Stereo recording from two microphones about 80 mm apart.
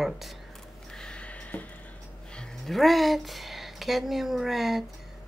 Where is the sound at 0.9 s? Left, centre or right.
Centre.